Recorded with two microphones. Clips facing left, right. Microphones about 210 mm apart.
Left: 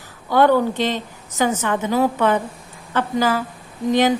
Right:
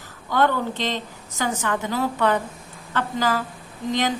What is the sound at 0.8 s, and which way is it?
A woman's voice, 20° left (ahead or behind).